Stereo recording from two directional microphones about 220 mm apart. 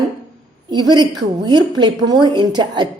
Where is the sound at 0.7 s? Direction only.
20° right (ahead or behind).